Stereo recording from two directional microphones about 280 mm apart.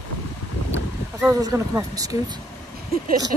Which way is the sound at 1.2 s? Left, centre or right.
Centre.